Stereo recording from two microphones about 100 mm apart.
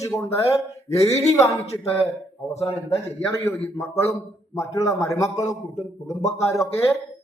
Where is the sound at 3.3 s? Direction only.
30° left (ahead or behind).